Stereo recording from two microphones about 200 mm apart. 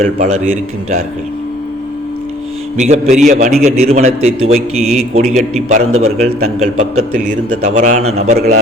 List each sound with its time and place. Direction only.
0.0 s a man's voice: 35° right (ahead or behind)
2.7 s a man's voice: 35° right (ahead or behind)